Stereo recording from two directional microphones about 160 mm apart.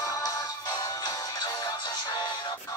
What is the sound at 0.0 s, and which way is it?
Music, 20° left (ahead or behind).